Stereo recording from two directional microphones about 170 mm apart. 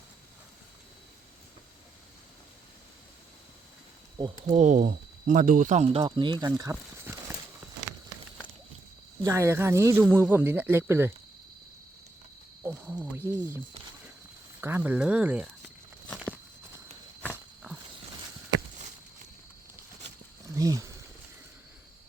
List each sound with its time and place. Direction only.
4.4 s speech: 45° right (ahead or behind); by 7.3 s 15° right (ahead or behind)
9.2 s speech: 15° right (ahead or behind)
12.6 s speech: 5° right (ahead or behind)
14.6 s speech: 10° right (ahead or behind)
16.0 s tearing: 5° left (ahead or behind)
20.5 s speech: 20° right (ahead or behind)